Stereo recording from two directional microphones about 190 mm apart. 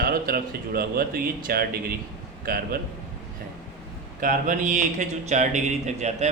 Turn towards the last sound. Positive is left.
turn(degrees=-35)  # may be behind; listen again after turning